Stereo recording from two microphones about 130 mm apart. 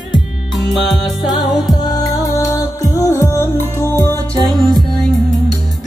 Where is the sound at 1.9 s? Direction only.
25° left (ahead or behind).